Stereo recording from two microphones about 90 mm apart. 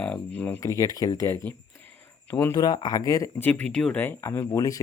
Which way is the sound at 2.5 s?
50° left (ahead or behind).